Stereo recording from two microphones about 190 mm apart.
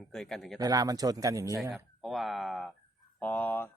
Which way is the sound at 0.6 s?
20° right (ahead or behind).